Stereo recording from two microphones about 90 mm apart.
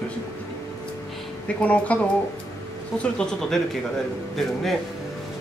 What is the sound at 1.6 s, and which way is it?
Speech, 15° left (ahead or behind).